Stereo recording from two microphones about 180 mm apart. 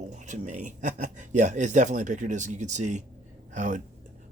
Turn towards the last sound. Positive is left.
turn(degrees=-45)  # may be behind; listen again after turning